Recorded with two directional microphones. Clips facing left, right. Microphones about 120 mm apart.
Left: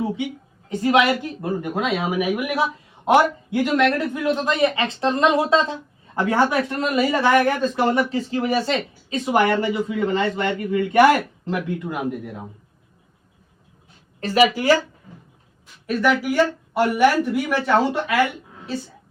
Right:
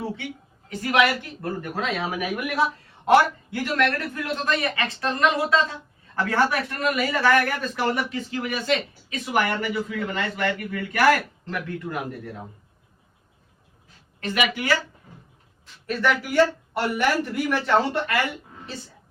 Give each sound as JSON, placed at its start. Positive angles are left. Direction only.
{"t": 0.7, "sound": "speech", "side_deg": 25}
{"t": 14.2, "sound": "speech", "side_deg": 35}
{"t": 16.0, "sound": "speech", "side_deg": 5}